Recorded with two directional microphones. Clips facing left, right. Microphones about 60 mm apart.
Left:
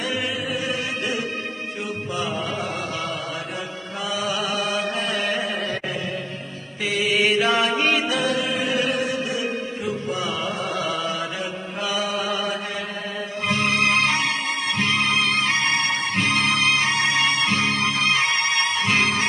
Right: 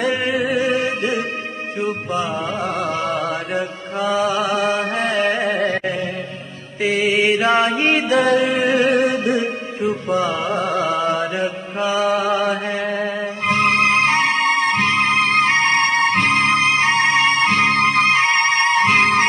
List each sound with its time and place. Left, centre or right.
0.0 s music: right
0.4 s music: right
0.7 s music: right
3.2 s mantra: right
6.8 s chant: right
14.4 s music: right
14.9 s music: right